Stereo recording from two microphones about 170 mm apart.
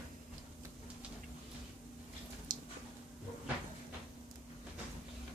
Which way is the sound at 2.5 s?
50° right (ahead or behind).